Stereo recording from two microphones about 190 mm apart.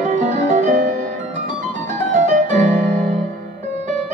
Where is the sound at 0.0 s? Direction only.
40° right (ahead or behind).